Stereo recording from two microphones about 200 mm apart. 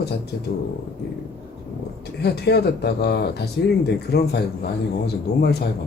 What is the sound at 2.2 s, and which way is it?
A man's voice, 55° left (ahead or behind).